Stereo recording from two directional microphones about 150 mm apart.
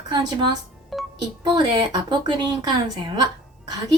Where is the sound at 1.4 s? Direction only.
30° right (ahead or behind).